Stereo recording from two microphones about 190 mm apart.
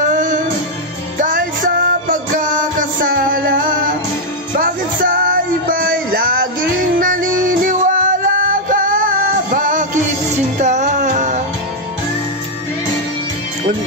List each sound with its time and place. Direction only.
0.1 s music: 45° right (ahead or behind)